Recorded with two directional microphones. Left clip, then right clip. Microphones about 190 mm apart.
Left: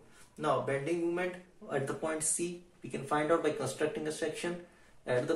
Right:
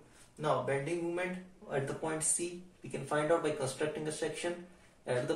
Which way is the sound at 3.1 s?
30° left (ahead or behind).